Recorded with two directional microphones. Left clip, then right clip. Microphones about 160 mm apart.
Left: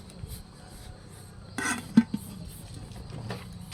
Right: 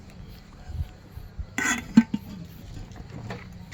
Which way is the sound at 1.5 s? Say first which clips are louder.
Right 4 dB; 65° right (ahead or behind).